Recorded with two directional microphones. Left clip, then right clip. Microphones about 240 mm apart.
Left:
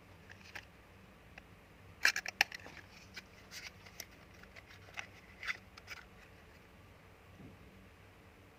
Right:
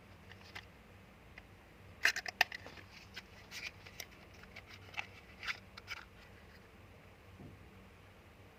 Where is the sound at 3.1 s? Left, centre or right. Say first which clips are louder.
Right 2 dB; centre.